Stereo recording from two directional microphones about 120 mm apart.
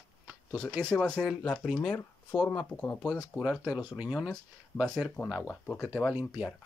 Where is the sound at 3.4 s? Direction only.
5° right (ahead or behind).